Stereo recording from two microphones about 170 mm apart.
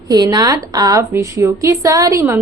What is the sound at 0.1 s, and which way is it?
A woman's voice, 20° right (ahead or behind).